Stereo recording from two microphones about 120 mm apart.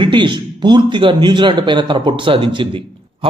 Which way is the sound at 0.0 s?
40° right (ahead or behind).